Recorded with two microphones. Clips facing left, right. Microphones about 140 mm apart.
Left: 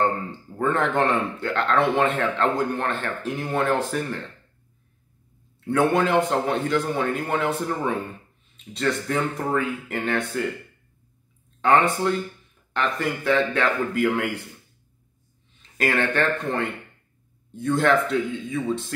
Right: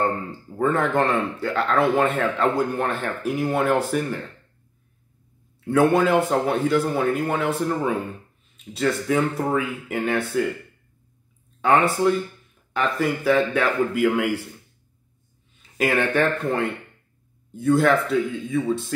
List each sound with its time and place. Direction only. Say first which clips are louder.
0.6 s speech: right 1 dB; 5° right (ahead or behind)
5.7 s speech: right 3 dB; 5° right (ahead or behind)
11.6 s a man's voice: right 1 dB; 5° right (ahead or behind)
15.8 s a man's voice: right 2 dB; 10° right (ahead or behind)
17.5 s speech: right 2 dB; 5° right (ahead or behind)